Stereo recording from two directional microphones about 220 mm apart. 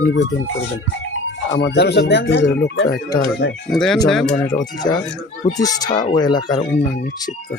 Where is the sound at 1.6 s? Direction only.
50° left (ahead or behind).